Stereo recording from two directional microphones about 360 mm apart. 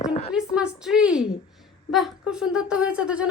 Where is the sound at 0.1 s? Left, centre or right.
Centre.